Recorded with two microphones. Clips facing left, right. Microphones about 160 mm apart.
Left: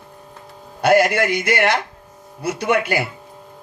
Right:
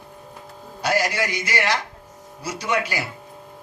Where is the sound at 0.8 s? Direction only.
55° left (ahead or behind).